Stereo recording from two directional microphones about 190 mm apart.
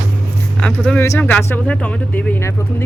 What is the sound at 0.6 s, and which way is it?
Speech, 5° left (ahead or behind).